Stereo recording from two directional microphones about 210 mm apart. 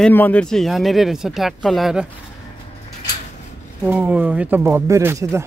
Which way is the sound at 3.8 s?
5° right (ahead or behind).